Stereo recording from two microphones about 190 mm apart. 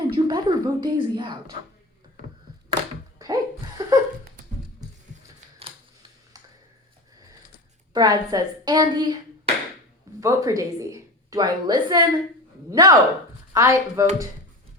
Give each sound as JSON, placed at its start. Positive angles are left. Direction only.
{"t": 0.1, "sound": "a woman's voice", "side_deg": -25}
{"t": 2.7, "sound": "a sound", "side_deg": -70}
{"t": 3.2, "sound": "laughter", "side_deg": -20}
{"t": 7.9, "sound": "a woman's voice", "side_deg": -20}
{"t": 10.2, "sound": "a woman's voice", "side_deg": -15}